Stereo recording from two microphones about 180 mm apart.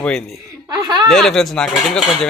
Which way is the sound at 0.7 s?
25° right (ahead or behind).